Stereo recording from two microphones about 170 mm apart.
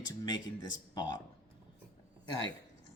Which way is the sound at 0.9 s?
25° left (ahead or behind).